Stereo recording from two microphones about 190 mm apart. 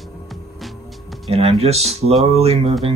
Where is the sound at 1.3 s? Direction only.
30° right (ahead or behind).